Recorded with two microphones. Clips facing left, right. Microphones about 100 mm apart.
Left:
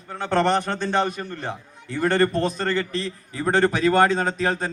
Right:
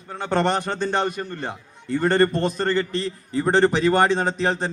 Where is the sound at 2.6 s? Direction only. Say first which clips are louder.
Right 2 dB; 35° right (ahead or behind).